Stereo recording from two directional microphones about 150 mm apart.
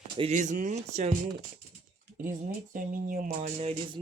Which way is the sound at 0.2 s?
50° right (ahead or behind).